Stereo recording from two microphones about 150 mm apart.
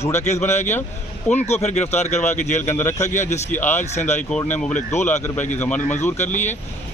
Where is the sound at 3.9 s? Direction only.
50° left (ahead or behind).